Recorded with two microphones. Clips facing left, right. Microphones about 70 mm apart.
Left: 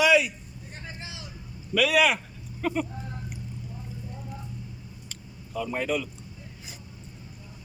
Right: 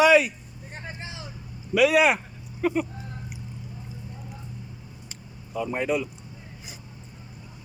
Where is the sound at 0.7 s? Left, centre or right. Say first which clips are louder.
Right 3 dB; right.